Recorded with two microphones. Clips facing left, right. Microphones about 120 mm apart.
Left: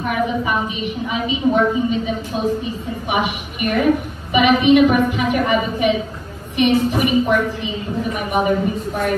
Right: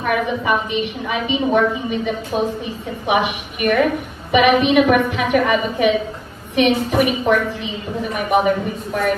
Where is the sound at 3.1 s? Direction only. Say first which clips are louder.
Right 3 dB; 65° right (ahead or behind).